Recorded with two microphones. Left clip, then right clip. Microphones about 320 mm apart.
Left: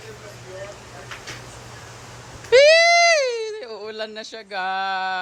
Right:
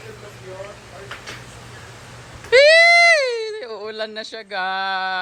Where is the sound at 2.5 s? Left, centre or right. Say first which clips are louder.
Right 2 dB; centre.